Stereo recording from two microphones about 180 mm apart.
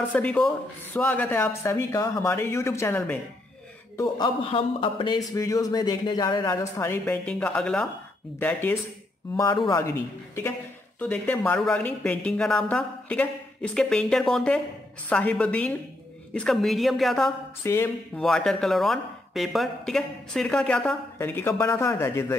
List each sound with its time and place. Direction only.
0.1 s a man's voice: 10° left (ahead or behind)
4.5 s speech: 30° left (ahead or behind); by 8.7 s 10° left (ahead or behind)
9.4 s speech: 20° left (ahead or behind); by 17.3 s centre (ahead or behind)
17.6 s speech: 10° left (ahead or behind)